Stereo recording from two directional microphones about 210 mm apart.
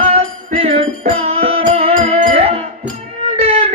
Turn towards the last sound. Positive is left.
turn(degrees=-30)  # may be behind; listen again after turning